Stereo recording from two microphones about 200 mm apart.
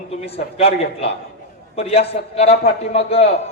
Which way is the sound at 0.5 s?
30° left (ahead or behind).